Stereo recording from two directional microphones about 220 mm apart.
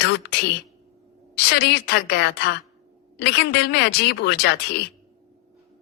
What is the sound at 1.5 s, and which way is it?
Speech, 50° left (ahead or behind).